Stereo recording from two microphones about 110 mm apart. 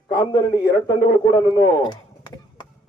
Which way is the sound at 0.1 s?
40° left (ahead or behind).